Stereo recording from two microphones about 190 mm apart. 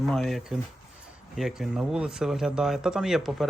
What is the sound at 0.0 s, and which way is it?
Speech, centre (ahead or behind).